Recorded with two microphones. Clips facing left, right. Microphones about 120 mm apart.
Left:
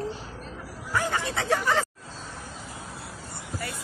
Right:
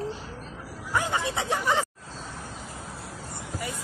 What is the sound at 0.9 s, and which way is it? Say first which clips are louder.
Speech: even; 20° right (ahead or behind).